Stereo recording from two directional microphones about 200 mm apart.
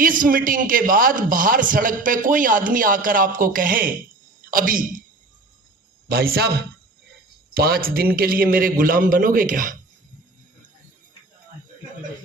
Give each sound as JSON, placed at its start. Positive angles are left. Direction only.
{"t": 0.0, "sound": "a man's voice", "side_deg": -45}
{"t": 6.1, "sound": "a man's voice", "side_deg": -50}
{"t": 7.5, "sound": "a man's voice", "side_deg": -50}